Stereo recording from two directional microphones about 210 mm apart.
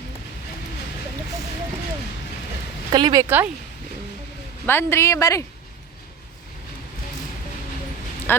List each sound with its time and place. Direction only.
2.9 s speech: 20° right (ahead or behind)
4.6 s a woman's voice: 10° left (ahead or behind)
8.3 s speech: 10° left (ahead or behind)